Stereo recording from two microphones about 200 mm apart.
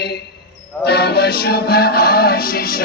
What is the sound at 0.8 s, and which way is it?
Music, 55° left (ahead or behind).